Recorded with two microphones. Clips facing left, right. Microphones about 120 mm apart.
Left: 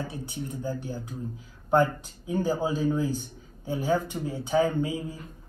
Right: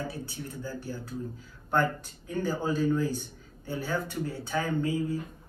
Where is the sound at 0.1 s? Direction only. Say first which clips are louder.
Left 3 dB; 20° left (ahead or behind).